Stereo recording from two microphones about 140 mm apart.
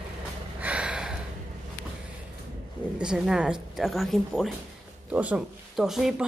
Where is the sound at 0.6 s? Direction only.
10° right (ahead or behind).